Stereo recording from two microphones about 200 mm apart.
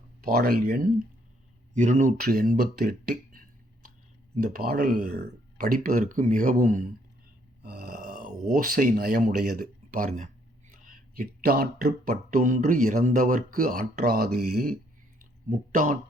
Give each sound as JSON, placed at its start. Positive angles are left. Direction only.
{"t": 0.2, "sound": "speech", "side_deg": -45}
{"t": 1.7, "sound": "speech", "side_deg": -40}
{"t": 7.6, "sound": "grunt", "side_deg": -55}
{"t": 8.5, "sound": "speech", "side_deg": -45}